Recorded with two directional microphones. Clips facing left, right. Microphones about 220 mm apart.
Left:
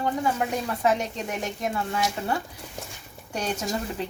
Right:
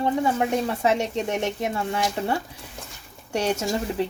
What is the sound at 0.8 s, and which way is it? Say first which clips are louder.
Speech: right 2 dB; 25° right (ahead or behind).